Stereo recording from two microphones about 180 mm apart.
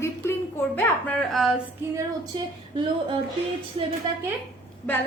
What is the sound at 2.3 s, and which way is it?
Speech, 25° right (ahead or behind).